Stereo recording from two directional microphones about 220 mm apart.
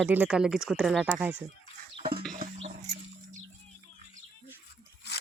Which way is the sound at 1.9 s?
25° right (ahead or behind).